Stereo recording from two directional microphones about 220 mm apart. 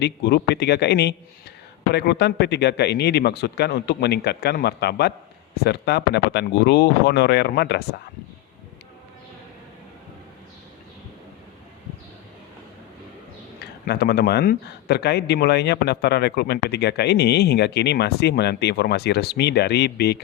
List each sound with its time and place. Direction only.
0.0 s a man's voice: 50° left (ahead or behind)
13.8 s a man's voice: 45° left (ahead or behind)